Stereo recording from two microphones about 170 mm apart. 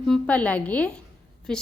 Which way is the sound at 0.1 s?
5° left (ahead or behind).